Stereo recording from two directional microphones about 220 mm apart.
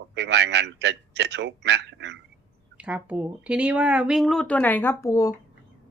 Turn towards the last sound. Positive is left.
turn(degrees=15)  # may be behind; listen again after turning